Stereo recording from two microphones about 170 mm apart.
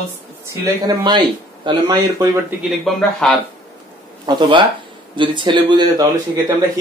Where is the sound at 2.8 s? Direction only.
5° left (ahead or behind).